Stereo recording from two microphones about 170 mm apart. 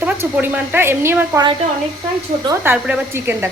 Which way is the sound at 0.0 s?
10° right (ahead or behind).